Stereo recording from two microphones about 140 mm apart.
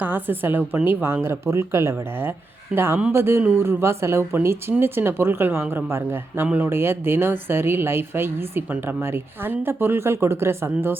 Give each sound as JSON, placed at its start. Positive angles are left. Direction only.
{"t": 0.0, "sound": "speech", "side_deg": -15}